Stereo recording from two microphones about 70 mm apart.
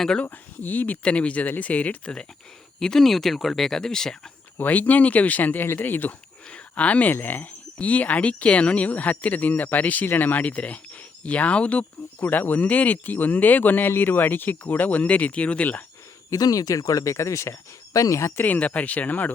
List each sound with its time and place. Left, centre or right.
0.0 s speech: centre
0.3 s speech: left
2.8 s speech: centre
4.5 s speech: left
16.3 s cricket: left
18.3 s speech: left